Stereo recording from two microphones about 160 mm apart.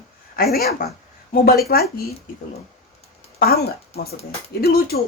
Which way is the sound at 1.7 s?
70° left (ahead or behind).